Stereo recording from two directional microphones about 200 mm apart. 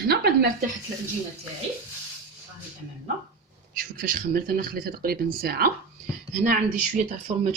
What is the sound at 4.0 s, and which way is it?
Speech, 45° right (ahead or behind).